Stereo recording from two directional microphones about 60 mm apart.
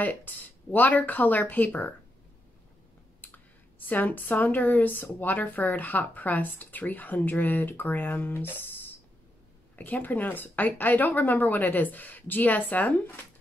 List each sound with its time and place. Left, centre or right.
0.0 s speech: left
3.2 s clicking: left
3.9 s speech: left